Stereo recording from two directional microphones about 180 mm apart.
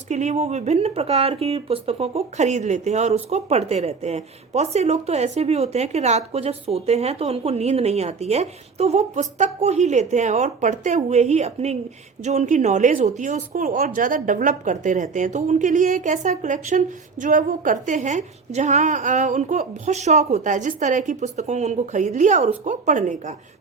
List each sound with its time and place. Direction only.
0.1 s speech: 40° right (ahead or behind)